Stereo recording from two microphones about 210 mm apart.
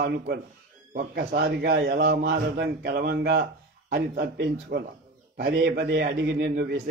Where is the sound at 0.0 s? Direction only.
50° right (ahead or behind).